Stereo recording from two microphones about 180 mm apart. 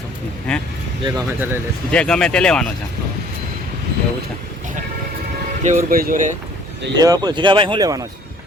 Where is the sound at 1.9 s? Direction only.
5° left (ahead or behind).